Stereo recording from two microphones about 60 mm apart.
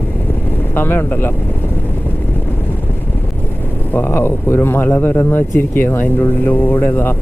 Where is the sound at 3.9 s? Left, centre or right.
Left.